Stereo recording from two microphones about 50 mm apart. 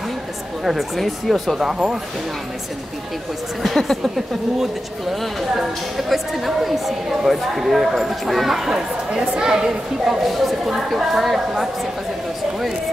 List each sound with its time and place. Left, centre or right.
0.7 s a woman's voice: centre
3.6 s a woman's voice: centre
5.2 s a woman's voice: centre
8.7 s a woman's voice: centre